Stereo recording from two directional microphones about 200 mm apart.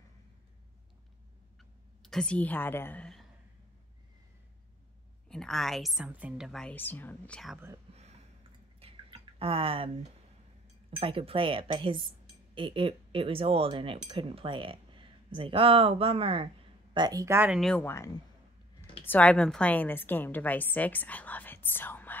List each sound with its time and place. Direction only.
1.6 s a woman's voice: 5° left (ahead or behind)
5.3 s a woman's voice: centre (ahead or behind)
7.9 s a sound: 30° right (ahead or behind)
8.7 s drip: 30° right (ahead or behind)
10.9 s a woman's voice: 25° right (ahead or behind); by 22.1 s 10° left (ahead or behind)